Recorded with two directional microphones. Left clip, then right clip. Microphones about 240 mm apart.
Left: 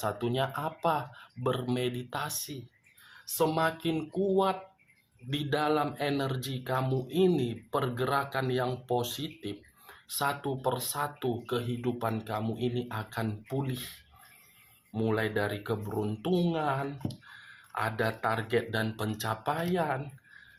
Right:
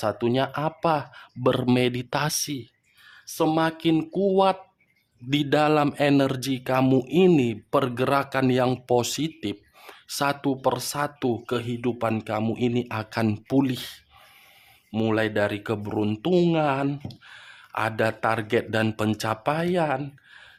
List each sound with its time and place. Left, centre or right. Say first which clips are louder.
0.0 s speech: right 7 dB; right
14.9 s speech: right 6 dB; right